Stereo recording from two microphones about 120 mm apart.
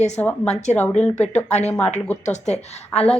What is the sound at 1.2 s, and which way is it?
Speech, 70° left (ahead or behind).